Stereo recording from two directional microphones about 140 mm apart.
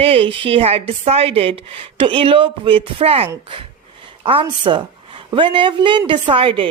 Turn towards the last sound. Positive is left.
turn(degrees=-40)  # may be behind; listen again after turning